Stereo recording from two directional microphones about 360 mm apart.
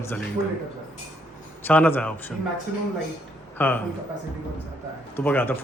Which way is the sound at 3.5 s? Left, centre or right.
Centre.